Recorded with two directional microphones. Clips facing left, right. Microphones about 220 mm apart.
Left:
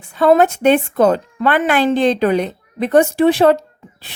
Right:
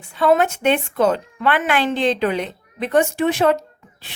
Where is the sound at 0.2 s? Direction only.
40° left (ahead or behind).